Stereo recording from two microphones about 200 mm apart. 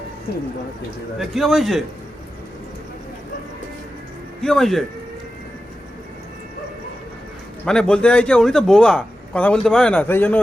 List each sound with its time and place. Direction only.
1.2 s a man's voice: centre (ahead or behind)
4.4 s speech: centre (ahead or behind)
7.6 s a man's voice: 5° left (ahead or behind)